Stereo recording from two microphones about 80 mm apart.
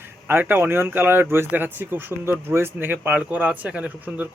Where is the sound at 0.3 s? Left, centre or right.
Right.